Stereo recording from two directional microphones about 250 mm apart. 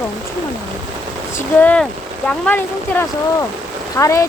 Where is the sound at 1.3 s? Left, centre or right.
Centre.